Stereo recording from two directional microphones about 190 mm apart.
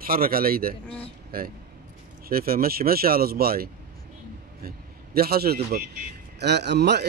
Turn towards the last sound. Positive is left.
turn(degrees=-60)  # may be behind; listen again after turning